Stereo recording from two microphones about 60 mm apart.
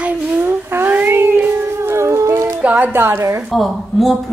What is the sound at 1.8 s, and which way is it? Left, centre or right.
Music, right.